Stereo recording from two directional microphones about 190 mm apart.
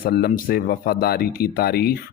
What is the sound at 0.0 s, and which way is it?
Speech, 50° left (ahead or behind).